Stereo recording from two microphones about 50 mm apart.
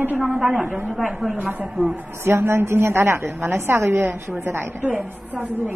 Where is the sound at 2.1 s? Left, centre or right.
Right.